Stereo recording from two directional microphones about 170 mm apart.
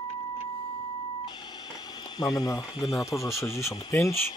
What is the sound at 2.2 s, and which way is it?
Speech, 20° left (ahead or behind).